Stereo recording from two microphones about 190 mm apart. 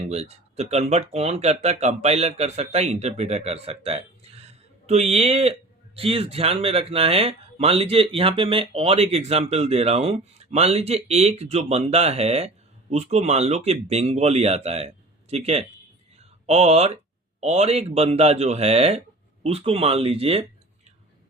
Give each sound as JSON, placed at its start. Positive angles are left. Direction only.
{"t": 0.0, "sound": "speech", "side_deg": -35}